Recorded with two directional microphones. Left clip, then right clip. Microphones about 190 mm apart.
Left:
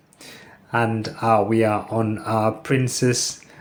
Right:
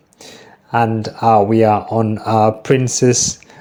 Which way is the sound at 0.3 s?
30° right (ahead or behind).